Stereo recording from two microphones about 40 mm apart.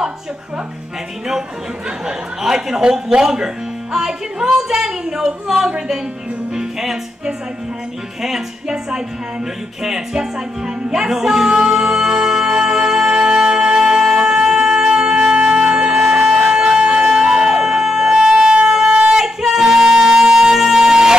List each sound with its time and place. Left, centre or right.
2.0 s speech: centre
6.5 s music: centre
8.2 s speech: centre
10.9 s music: centre
13.1 s wind instrument: right
19.1 s music: centre